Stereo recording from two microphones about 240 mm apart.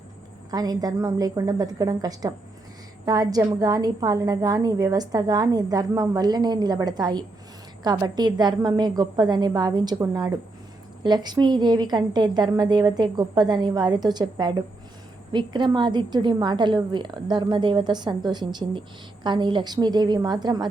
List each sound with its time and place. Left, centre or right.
0.5 s a woman's voice: centre